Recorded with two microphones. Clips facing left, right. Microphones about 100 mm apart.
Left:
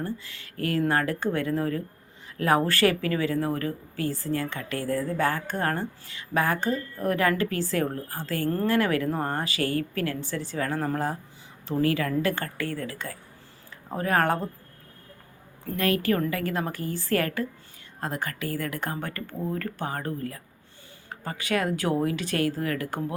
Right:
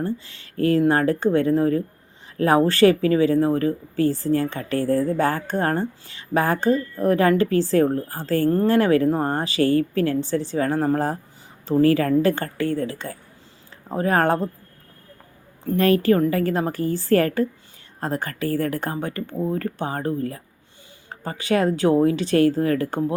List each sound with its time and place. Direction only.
0.0 s speech: 30° right (ahead or behind)
15.6 s speech: 30° right (ahead or behind)
18.9 s speech: 20° right (ahead or behind)